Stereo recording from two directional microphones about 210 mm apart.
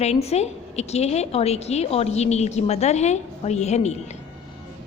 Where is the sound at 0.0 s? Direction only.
30° left (ahead or behind).